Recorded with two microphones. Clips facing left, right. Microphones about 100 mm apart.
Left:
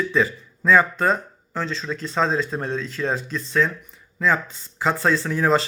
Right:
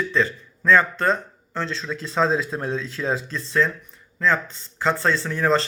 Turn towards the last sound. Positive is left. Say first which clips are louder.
# left 1 dB
turn(degrees=5)  # may be behind; listen again after turning